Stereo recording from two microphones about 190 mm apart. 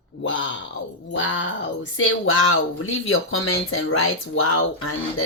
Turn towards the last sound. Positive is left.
turn(degrees=90)